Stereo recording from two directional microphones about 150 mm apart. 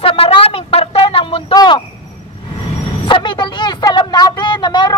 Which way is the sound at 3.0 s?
35° left (ahead or behind).